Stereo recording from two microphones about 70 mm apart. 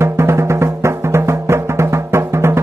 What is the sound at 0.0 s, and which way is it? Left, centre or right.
Music, right.